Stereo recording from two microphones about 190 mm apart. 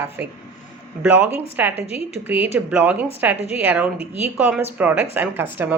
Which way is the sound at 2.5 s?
10° right (ahead or behind).